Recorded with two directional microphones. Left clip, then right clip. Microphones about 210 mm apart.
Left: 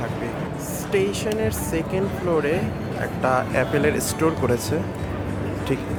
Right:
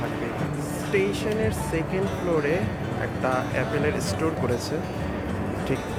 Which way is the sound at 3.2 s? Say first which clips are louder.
Left 5 dB; 15° left (ahead or behind).